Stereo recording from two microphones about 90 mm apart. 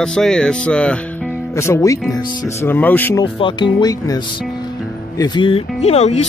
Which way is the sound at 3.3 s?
65° left (ahead or behind).